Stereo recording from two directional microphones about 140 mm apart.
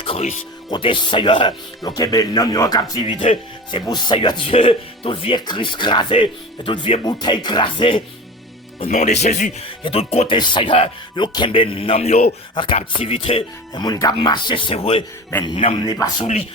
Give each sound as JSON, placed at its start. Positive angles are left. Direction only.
{"t": 0.0, "sound": "music", "side_deg": 40}
{"t": 0.7, "sound": "speech", "side_deg": 35}
{"t": 8.8, "sound": "speech", "side_deg": 55}
{"t": 10.3, "sound": "speech", "side_deg": 35}